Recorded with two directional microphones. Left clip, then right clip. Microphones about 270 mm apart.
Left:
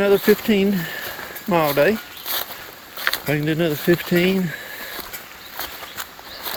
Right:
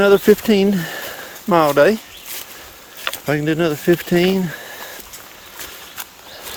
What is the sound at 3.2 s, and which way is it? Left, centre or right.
Speech, centre.